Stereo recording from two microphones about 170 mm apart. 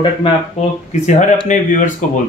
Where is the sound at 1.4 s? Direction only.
45° left (ahead or behind).